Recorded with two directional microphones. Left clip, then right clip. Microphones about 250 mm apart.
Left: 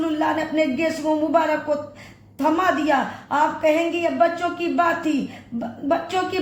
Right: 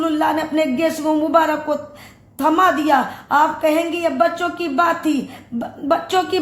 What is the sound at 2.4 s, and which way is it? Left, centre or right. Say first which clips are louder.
A woman's voice: right 5 dB; right.